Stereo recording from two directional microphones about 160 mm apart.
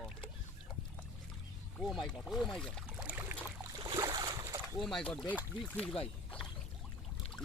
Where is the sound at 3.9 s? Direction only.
25° right (ahead or behind).